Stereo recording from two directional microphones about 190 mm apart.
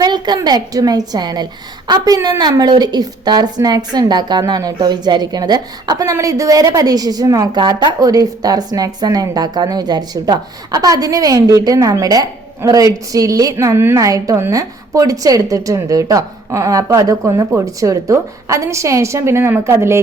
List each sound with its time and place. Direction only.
0.0 s a woman's voice: 20° right (ahead or behind)